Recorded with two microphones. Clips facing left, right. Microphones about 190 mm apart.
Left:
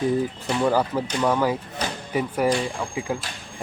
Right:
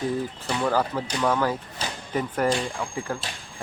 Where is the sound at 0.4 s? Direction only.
10° left (ahead or behind).